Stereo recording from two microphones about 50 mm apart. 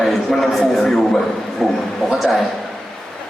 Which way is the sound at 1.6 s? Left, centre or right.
Centre.